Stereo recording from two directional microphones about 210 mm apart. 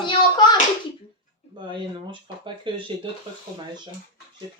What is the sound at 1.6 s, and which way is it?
A woman's voice, 20° right (ahead or behind).